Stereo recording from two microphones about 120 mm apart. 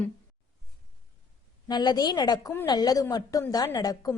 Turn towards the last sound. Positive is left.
turn(degrees=30)  # may be behind; listen again after turning